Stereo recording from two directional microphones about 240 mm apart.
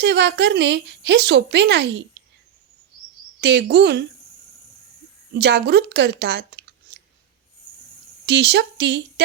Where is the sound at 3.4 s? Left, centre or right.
Right.